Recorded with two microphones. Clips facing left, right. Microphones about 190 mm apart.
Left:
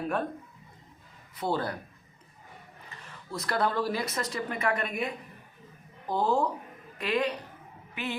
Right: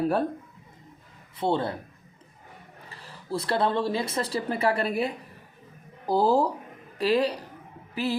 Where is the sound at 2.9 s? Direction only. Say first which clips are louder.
Right 8 dB; 35° right (ahead or behind).